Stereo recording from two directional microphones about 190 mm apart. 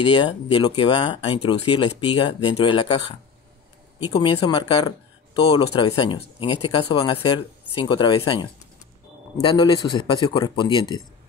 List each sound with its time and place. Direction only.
0.0 s speech: 25° left (ahead or behind)